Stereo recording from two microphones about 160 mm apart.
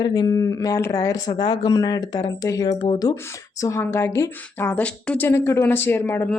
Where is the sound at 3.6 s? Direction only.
15° left (ahead or behind).